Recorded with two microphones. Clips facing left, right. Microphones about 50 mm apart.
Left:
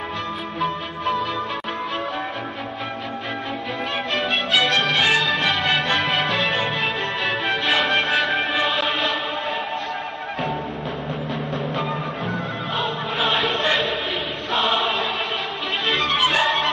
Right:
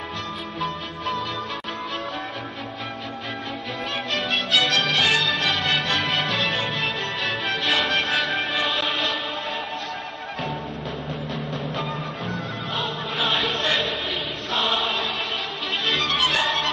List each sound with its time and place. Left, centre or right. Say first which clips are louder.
4.2 s music: left 2 dB; centre
6.8 s music: left 3 dB; centre
11.7 s music: left 3 dB; centre
13.2 s chant: left 2 dB; centre
13.7 s chant: left 2 dB; centre
14.5 s choir: left 3 dB; centre
15.9 s music: left 3 dB; centre